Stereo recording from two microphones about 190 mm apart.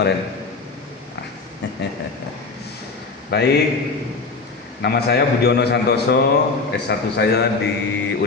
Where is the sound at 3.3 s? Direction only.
60° left (ahead or behind).